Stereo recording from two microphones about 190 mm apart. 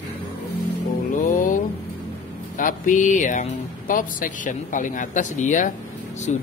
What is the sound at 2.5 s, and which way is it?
Speech, 45° left (ahead or behind).